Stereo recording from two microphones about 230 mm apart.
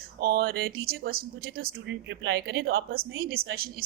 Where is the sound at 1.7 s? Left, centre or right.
Right.